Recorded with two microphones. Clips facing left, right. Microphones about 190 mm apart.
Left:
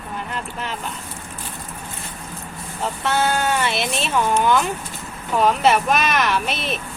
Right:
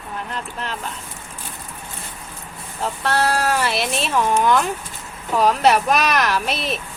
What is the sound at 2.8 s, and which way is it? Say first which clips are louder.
Speech: even; centre (ahead or behind).